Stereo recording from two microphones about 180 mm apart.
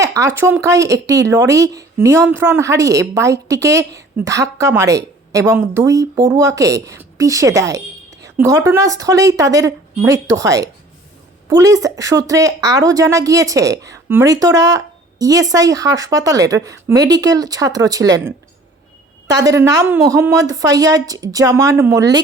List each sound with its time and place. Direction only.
0.0 s a woman's voice: 15° right (ahead or behind)
19.3 s a woman's voice: 20° right (ahead or behind)